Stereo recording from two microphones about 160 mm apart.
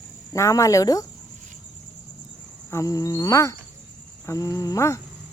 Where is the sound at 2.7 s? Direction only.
20° left (ahead or behind).